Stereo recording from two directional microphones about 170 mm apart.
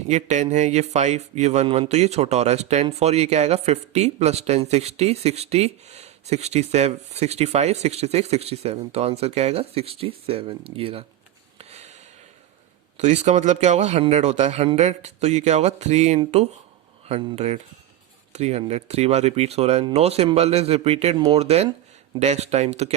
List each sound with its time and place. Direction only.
0.1 s speech: 45° right (ahead or behind)
11.5 s a sound: 40° right (ahead or behind)
13.0 s speech: 45° right (ahead or behind)